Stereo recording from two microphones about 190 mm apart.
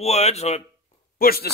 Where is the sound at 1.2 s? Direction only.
50° left (ahead or behind).